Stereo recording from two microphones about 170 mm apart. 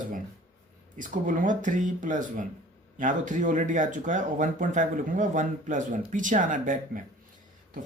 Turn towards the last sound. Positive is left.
turn(degrees=-50)  # may be behind; listen again after turning